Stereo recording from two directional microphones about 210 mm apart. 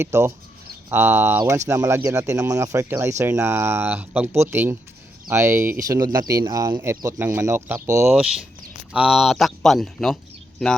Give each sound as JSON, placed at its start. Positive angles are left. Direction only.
{"t": 0.0, "sound": "speech", "side_deg": -10}